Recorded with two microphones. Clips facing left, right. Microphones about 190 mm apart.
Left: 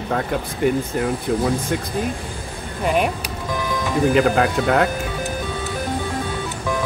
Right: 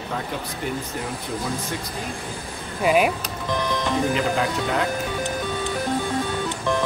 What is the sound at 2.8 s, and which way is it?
Speech, 5° right (ahead or behind).